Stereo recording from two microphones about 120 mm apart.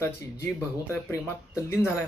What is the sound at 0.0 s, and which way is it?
Speech, 20° left (ahead or behind).